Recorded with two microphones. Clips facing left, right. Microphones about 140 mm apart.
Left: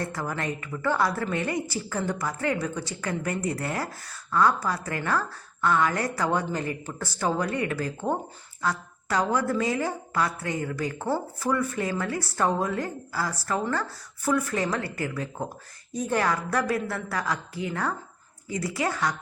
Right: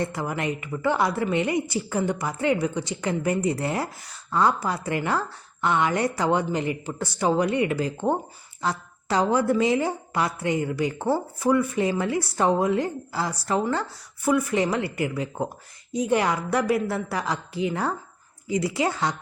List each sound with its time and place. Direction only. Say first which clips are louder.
0.0 s a woman's voice: right 3 dB; 20° right (ahead or behind)